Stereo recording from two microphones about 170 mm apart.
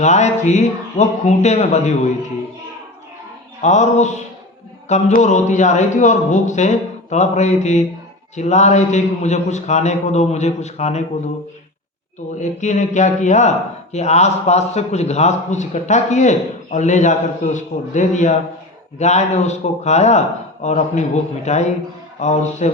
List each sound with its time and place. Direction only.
0.0 s a man's voice: 45° left (ahead or behind)
3.6 s a man's voice: 45° left (ahead or behind)
12.4 s a man's voice: 45° left (ahead or behind)